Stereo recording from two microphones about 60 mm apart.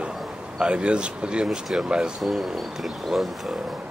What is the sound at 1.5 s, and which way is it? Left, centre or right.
Speech, centre.